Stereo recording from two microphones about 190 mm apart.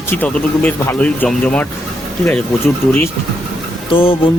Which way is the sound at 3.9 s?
25° left (ahead or behind).